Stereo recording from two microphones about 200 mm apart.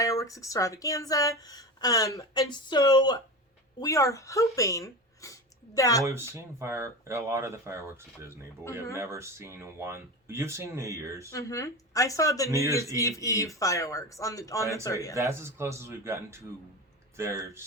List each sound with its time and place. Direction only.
0.0 s a woman's voice: 15° left (ahead or behind)
6.3 s speech: 15° right (ahead or behind)
11.3 s a woman's voice: 15° left (ahead or behind)
12.6 s speech: 15° right (ahead or behind)
12.9 s a woman's voice: 15° left (ahead or behind)
15.1 s speech: 15° right (ahead or behind)